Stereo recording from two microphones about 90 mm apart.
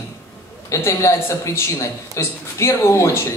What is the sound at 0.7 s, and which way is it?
Speech, 30° left (ahead or behind).